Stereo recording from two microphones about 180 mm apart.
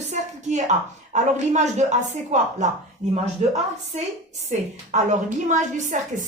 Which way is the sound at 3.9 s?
40° right (ahead or behind).